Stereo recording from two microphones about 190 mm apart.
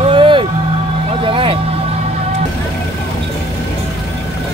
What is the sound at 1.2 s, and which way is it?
Vehicle, 25° right (ahead or behind).